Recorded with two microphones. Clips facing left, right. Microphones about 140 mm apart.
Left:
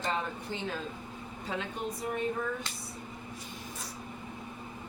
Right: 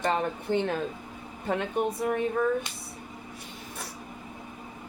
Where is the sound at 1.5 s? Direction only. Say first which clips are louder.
Right 8 dB; 55° right (ahead or behind).